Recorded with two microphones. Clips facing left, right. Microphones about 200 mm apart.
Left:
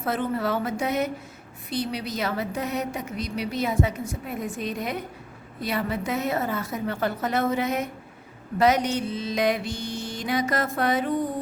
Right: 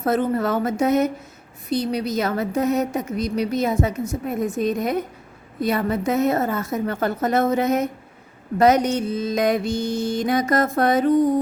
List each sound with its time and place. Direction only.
0.0 s a woman's voice: 40° right (ahead or behind)